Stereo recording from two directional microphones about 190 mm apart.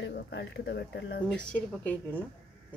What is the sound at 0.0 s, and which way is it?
Speech, 65° left (ahead or behind).